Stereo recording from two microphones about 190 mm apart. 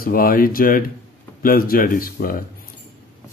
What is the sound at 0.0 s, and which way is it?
Speech, 50° left (ahead or behind).